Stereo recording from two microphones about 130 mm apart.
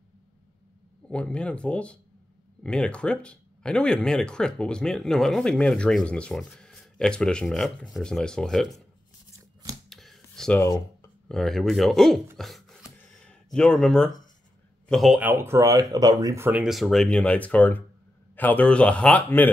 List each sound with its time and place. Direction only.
1.0 s speech: 10° left (ahead or behind)
9.8 s a sound: centre (ahead or behind)
10.6 s speech: 25° left (ahead or behind)
11.2 s speech: 5° left (ahead or behind)
12.4 s a sound: centre (ahead or behind)
14.9 s a man's voice: centre (ahead or behind)
15.1 s speech: 15° right (ahead or behind)
16.6 s speech: centre (ahead or behind)